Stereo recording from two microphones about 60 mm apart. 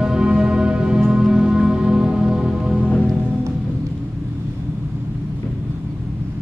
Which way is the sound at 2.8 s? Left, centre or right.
Centre.